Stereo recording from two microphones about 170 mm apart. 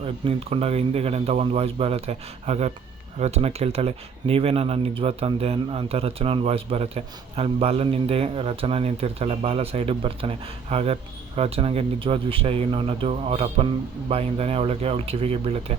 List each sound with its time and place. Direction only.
0.0 s speech: 35° right (ahead or behind)